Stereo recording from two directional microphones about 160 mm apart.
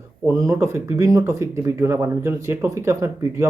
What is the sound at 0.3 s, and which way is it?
Speech, 20° right (ahead or behind).